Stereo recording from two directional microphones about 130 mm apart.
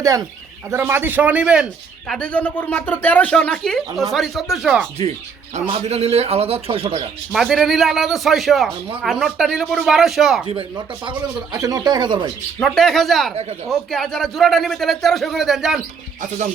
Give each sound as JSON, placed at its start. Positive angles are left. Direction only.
{"t": 0.0, "sound": "a man's voice", "side_deg": -25}
{"t": 2.0, "sound": "a man's voice", "side_deg": 5}
{"t": 5.5, "sound": "a man's voice", "side_deg": -55}
{"t": 7.3, "sound": "a man's voice", "side_deg": 0}
{"t": 10.4, "sound": "speech", "side_deg": -40}
{"t": 11.6, "sound": "speech", "side_deg": -30}
{"t": 12.6, "sound": "a man's voice", "side_deg": 5}
{"t": 13.3, "sound": "a man's voice", "side_deg": -55}
{"t": 13.7, "sound": "a man's voice", "side_deg": 5}